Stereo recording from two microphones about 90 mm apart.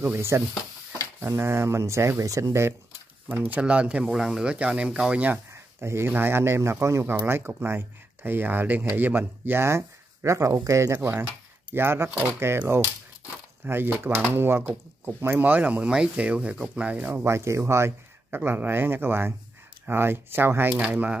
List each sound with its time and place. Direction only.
0.0 s speech: 30° right (ahead or behind)
3.3 s speech: 20° right (ahead or behind)
5.5 s speech: 30° right (ahead or behind); by 17.1 s 15° right (ahead or behind)
17.1 s speech: 30° right (ahead or behind); by 21.2 s 15° right (ahead or behind)